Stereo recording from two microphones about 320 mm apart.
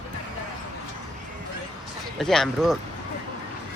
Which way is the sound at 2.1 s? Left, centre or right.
Centre.